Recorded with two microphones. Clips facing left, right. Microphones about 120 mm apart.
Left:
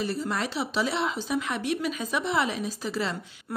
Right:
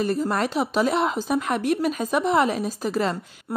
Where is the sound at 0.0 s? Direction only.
45° right (ahead or behind).